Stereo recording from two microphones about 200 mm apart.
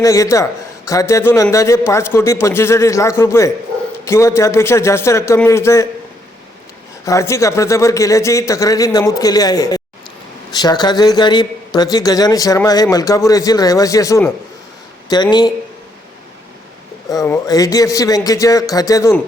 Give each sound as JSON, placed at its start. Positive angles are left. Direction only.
{"t": 0.0, "sound": "a man's voice", "side_deg": 15}
{"t": 7.0, "sound": "a man's voice", "side_deg": 15}
{"t": 17.1, "sound": "a man's voice", "side_deg": 15}